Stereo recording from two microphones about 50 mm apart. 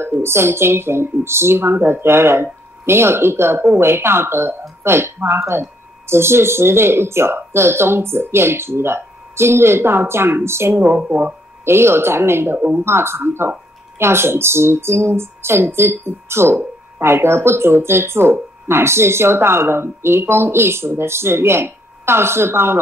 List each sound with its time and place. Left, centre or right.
0.2 s speech: right